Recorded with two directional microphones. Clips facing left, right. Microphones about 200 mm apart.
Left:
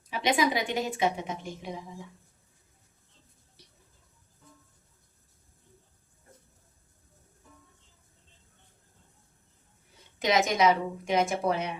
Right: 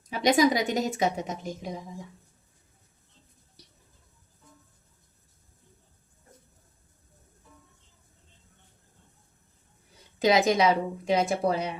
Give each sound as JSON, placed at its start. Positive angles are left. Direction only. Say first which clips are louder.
{"t": 0.1, "sound": "a woman's voice", "louder": "right 5 dB", "side_deg": -40}
{"t": 10.2, "sound": "a woman's voice", "louder": "right 3 dB", "side_deg": -35}